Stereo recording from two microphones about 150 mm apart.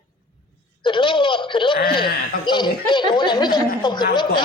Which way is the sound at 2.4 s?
30° left (ahead or behind).